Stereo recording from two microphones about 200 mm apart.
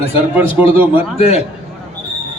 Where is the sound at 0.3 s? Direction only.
10° right (ahead or behind).